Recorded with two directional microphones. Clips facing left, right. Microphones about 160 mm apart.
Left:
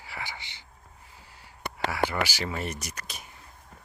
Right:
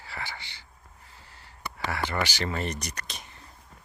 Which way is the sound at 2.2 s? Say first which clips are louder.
Right 2 dB; 10° left (ahead or behind).